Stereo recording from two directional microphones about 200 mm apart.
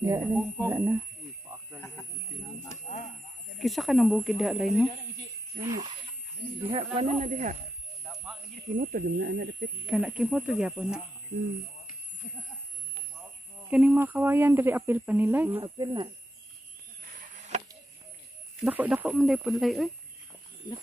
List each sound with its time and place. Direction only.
0.7 s speech: 10° right (ahead or behind)
3.5 s speech: centre (ahead or behind)
5.6 s speech: 20° right (ahead or behind); by 7.5 s 35° right (ahead or behind)
8.7 s speech: 45° right (ahead or behind)
9.8 s speech: 5° right (ahead or behind)
13.7 s speech: 5° right (ahead or behind)
15.6 s speech: 20° right (ahead or behind)
17.2 s chop: 35° right (ahead or behind)
18.6 s speech: 5° right (ahead or behind)